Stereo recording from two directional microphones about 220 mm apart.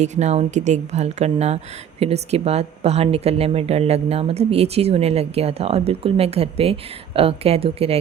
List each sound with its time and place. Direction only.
0.0 s speech: 30° right (ahead or behind)